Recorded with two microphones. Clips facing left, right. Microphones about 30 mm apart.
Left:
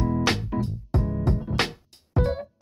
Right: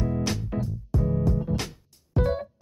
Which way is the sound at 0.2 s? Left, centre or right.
Left.